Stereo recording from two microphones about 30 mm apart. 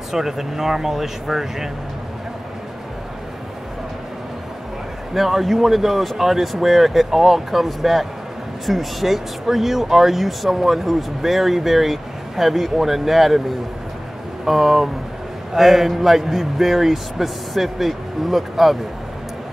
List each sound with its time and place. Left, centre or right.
0.1 s speech: centre
5.1 s speech: centre
14.4 s speech: centre